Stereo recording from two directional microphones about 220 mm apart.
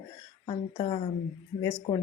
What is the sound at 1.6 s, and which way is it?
Speech, 15° left (ahead or behind).